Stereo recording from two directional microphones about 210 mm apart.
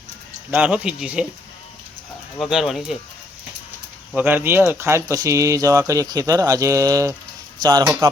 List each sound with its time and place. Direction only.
0.5 s speech: 5° right (ahead or behind)
2.4 s speech: centre (ahead or behind)
4.1 s speech: 10° right (ahead or behind)